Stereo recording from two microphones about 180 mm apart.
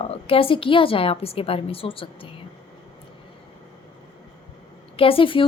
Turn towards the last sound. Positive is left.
turn(degrees=30)  # may be behind; listen again after turning